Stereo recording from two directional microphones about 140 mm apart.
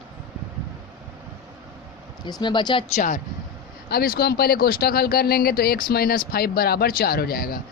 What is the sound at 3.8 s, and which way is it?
Speech, 90° left.